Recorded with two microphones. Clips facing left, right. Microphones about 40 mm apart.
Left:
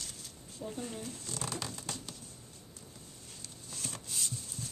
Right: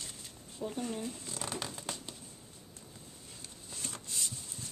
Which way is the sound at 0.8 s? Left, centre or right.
Centre.